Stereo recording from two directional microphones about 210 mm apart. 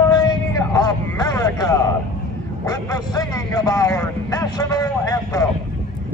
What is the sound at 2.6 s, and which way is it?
A man's voice, 15° left (ahead or behind).